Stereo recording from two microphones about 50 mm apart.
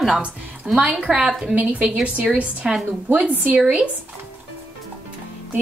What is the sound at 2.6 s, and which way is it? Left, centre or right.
Speech, centre.